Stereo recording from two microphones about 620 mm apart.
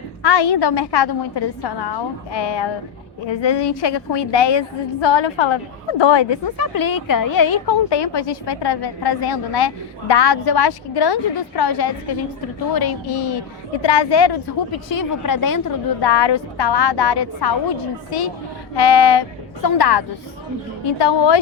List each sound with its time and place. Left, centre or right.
0.2 s a woman's voice: left
18.8 s a woman's voice: left